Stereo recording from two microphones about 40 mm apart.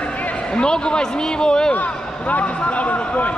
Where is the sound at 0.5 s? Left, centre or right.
Left.